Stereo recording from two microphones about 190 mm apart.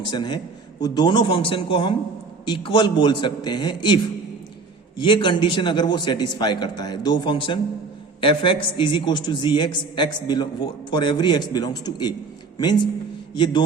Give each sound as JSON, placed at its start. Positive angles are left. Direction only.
{"t": 0.1, "sound": "a man's voice", "side_deg": 25}
{"t": 5.0, "sound": "a man's voice", "side_deg": 25}